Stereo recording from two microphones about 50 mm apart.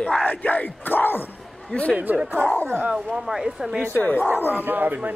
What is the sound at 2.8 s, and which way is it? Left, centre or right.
Speech, centre.